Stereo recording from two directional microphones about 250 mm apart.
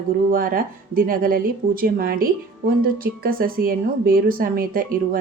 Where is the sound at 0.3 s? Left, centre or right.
Right.